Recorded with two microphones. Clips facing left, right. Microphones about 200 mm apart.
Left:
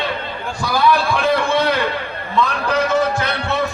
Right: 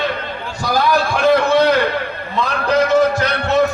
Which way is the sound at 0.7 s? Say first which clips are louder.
Even; 40° right (ahead or behind).